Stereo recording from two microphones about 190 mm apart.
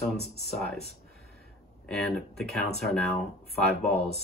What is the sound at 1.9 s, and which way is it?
Speech, centre (ahead or behind).